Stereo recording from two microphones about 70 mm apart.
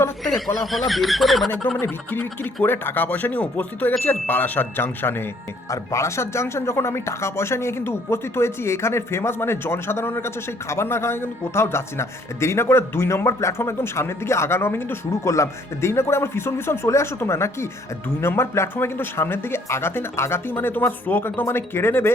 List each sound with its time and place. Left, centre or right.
0.3 s speech: centre
1.8 s speech: left
5.7 s speech: left
15.2 s speech: left